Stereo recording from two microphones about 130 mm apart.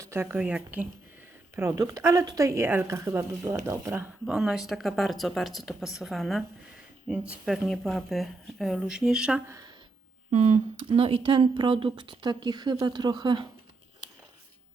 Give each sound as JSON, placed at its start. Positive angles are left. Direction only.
{"t": 0.0, "sound": "speech", "side_deg": -20}
{"t": 1.5, "sound": "a woman's voice", "side_deg": -20}
{"t": 3.9, "sound": "speech", "side_deg": -5}
{"t": 10.3, "sound": "speech", "side_deg": -60}
{"t": 10.8, "sound": "speech", "side_deg": -45}